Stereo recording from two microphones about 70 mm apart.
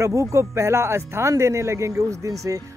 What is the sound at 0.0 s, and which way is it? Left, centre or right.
Speech, right.